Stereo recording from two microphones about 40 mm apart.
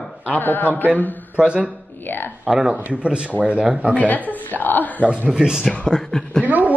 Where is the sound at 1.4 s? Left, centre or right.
Right.